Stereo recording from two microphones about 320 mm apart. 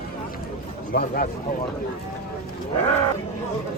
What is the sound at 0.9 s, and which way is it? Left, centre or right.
Speech, left.